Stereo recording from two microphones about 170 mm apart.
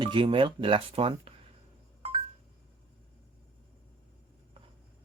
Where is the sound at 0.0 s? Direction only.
30° right (ahead or behind).